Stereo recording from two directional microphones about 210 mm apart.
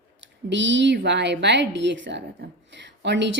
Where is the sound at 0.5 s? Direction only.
60° right (ahead or behind).